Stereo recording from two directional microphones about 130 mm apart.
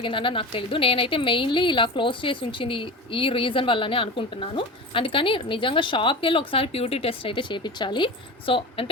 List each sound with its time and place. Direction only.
0.0 s a woman's voice: 40° left (ahead or behind)